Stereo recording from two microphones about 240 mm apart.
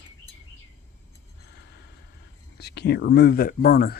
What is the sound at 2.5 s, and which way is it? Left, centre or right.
Speech, left.